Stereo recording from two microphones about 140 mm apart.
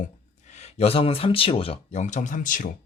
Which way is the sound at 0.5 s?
50° left (ahead or behind).